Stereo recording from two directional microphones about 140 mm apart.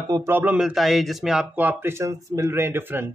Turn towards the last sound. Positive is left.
turn(degrees=-15)  # may be behind; listen again after turning